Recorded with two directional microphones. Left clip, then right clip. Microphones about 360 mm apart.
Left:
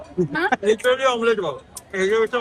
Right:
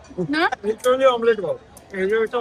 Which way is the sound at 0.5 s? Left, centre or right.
Centre.